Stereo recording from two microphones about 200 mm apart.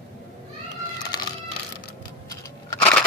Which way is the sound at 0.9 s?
20° left (ahead or behind).